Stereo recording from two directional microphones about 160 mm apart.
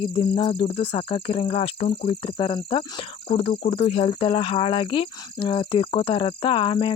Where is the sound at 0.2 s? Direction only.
30° left (ahead or behind).